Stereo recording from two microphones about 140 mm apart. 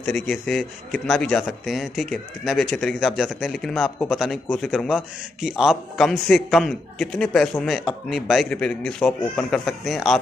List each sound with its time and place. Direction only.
0.0 s a man's voice: 5° left (ahead or behind)